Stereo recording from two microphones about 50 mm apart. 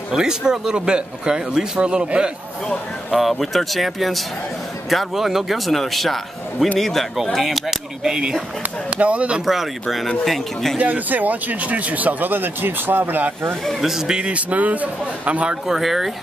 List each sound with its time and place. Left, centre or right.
0.1 s speech: centre
3.1 s a man's voice: centre
8.9 s a man's voice: right
9.5 s a man's voice: centre
10.8 s speech: right
13.7 s a man's voice: centre; by 15.5 s right
15.6 s a man's voice: centre